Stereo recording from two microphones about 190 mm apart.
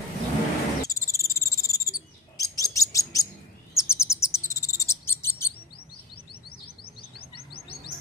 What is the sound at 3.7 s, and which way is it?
Chirp, 15° left (ahead or behind).